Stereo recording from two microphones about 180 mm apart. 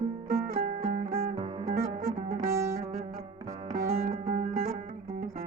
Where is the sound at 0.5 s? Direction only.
40° right (ahead or behind).